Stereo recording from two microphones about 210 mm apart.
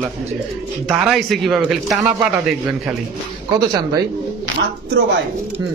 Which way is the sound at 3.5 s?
15° right (ahead or behind).